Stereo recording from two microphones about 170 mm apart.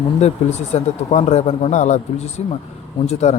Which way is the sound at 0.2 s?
40° left (ahead or behind).